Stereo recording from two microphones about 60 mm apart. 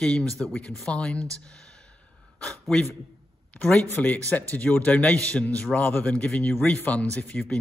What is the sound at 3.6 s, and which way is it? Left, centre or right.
A man's voice, left.